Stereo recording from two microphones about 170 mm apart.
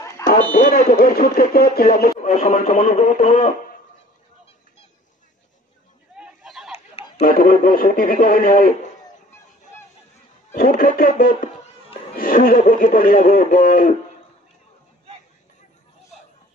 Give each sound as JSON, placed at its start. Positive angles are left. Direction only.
{"t": 0.6, "sound": "a man's voice", "side_deg": 60}
{"t": 2.1, "sound": "speech", "side_deg": 50}
{"t": 6.1, "sound": "a sound", "side_deg": -5}
{"t": 7.2, "sound": "a man's voice", "side_deg": 55}
{"t": 10.5, "sound": "a man's voice", "side_deg": 60}